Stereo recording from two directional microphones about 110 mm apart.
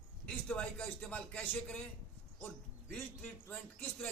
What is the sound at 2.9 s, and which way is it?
A man's voice, 15° left (ahead or behind).